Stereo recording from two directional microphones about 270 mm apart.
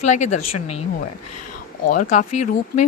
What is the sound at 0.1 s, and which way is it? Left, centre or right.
Speech, left.